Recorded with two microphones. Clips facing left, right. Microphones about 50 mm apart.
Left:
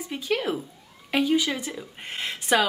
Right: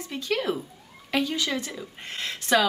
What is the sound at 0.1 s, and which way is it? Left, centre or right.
Speech, centre.